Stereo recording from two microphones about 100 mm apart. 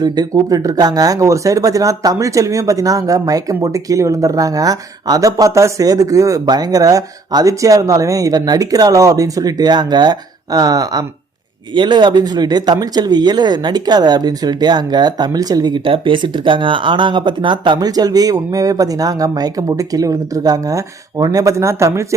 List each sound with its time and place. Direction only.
0.0 s speech: 40° right (ahead or behind)